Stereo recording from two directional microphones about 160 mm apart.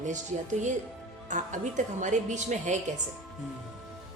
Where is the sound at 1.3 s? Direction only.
50° right (ahead or behind).